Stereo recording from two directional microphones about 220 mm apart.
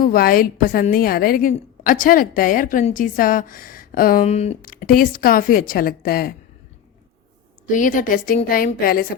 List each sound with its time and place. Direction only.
0.0 s a woman's voice: 40° left (ahead or behind)
7.7 s a woman's voice: 35° left (ahead or behind)